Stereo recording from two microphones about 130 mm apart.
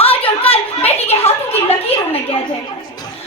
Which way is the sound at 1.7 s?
50° left (ahead or behind).